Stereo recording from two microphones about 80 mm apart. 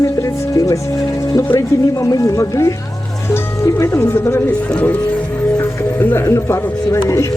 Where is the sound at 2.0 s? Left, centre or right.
Left.